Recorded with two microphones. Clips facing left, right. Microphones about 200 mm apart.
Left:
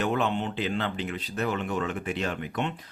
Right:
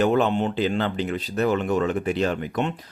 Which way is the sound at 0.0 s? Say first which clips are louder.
Right 7 dB; 40° right (ahead or behind).